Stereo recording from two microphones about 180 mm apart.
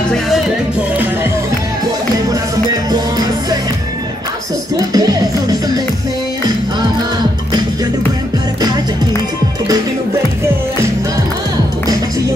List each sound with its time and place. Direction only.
2.7 s music: 20° right (ahead or behind)
4.9 s music: 20° right (ahead or behind)